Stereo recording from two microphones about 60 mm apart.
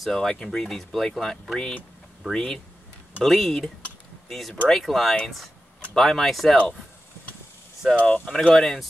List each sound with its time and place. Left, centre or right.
0.0 s speech: centre
7.9 s speech: left
8.3 s speech: centre